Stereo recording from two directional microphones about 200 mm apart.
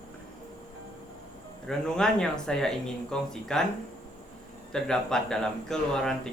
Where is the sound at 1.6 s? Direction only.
5° left (ahead or behind).